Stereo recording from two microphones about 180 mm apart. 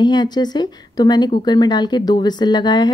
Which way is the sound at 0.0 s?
25° left (ahead or behind).